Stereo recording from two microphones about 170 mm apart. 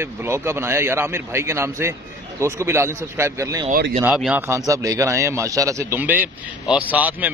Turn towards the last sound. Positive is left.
turn(degrees=-10)  # may be behind; listen again after turning